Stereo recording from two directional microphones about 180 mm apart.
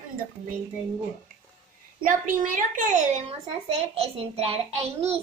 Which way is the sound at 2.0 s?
50° right (ahead or behind).